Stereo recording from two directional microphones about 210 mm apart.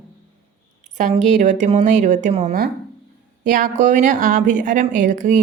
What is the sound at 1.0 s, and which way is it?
A woman's voice, 35° right (ahead or behind).